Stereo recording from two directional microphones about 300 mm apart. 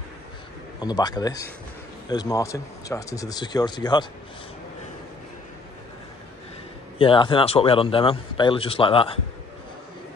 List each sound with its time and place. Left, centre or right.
0.7 s a man's voice: centre
7.0 s a man's voice: centre